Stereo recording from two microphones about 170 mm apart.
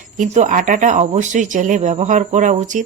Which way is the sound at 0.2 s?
50° right (ahead or behind).